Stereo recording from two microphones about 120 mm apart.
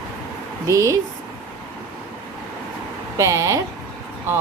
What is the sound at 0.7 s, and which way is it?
Speech, 25° right (ahead or behind).